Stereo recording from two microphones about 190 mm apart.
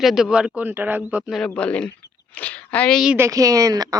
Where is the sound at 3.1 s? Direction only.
15° right (ahead or behind).